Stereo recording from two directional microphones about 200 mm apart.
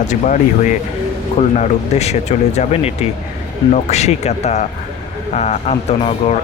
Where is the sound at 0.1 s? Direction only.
35° left (ahead or behind).